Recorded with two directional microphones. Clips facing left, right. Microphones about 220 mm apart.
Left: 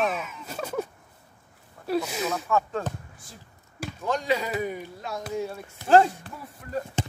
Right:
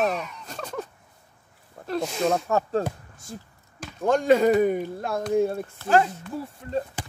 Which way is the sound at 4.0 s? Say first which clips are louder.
Right 8 dB; 50° right (ahead or behind).